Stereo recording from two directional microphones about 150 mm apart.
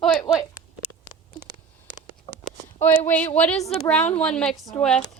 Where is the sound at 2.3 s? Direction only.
30° left (ahead or behind).